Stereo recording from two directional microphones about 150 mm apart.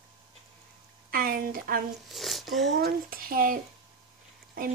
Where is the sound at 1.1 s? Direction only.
75° right (ahead or behind).